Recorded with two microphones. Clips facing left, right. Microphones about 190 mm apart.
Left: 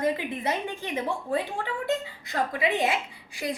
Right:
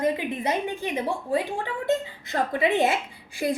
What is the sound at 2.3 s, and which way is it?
Speech, 25° right (ahead or behind).